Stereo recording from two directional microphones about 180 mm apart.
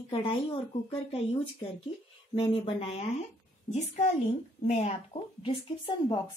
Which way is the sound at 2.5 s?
30° left (ahead or behind).